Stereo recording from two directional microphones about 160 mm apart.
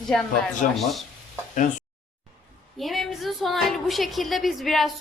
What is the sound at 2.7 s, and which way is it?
A woman's voice, centre (ahead or behind).